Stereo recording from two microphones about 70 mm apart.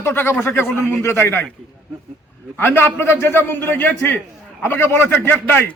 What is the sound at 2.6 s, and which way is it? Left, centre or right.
A man's voice, left.